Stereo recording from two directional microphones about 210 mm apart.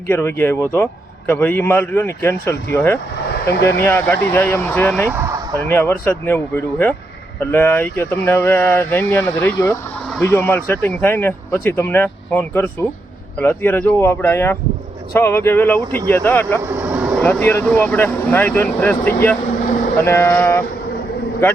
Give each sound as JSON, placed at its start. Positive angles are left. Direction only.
{"t": 0.1, "sound": "speech", "side_deg": 10}
{"t": 5.1, "sound": "vehicle", "side_deg": -15}
{"t": 5.6, "sound": "speech", "side_deg": 10}
{"t": 16.6, "sound": "vehicle", "side_deg": -10}
{"t": 17.2, "sound": "speech", "side_deg": 10}